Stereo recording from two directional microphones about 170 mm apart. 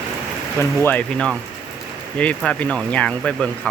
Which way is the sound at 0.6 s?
10° left (ahead or behind).